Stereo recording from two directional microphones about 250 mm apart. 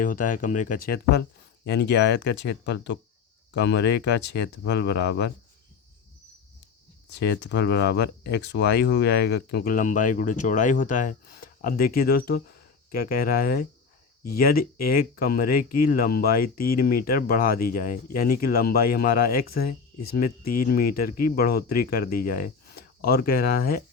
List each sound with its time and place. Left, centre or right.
0.0 s speech: left
7.1 s speech: left